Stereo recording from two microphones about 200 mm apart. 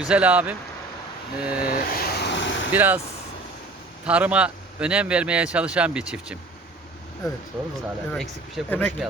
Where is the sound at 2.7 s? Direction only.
10° right (ahead or behind).